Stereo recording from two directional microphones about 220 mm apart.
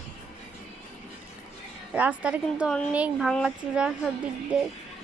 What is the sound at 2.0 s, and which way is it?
A child's voice, 5° right (ahead or behind).